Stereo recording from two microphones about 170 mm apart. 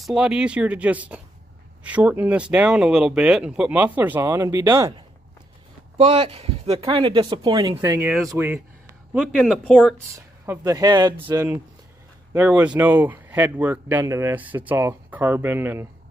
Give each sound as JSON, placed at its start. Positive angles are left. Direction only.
{"t": 0.0, "sound": "speech", "side_deg": -5}
{"t": 5.9, "sound": "speech", "side_deg": -35}
{"t": 9.1, "sound": "speech", "side_deg": 0}
{"t": 10.1, "sound": "speech", "side_deg": -15}
{"t": 12.4, "sound": "speech", "side_deg": -10}